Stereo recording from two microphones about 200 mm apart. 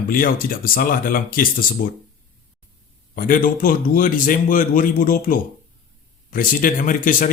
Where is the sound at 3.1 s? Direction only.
45° left (ahead or behind).